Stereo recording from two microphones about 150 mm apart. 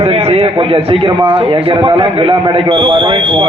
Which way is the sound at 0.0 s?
45° right (ahead or behind).